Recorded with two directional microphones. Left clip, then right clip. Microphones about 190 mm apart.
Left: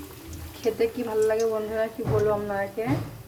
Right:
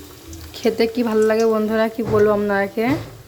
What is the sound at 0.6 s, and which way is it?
Speech, 50° right (ahead or behind).